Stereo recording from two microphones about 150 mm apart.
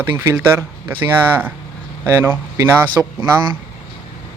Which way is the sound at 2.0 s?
15° right (ahead or behind).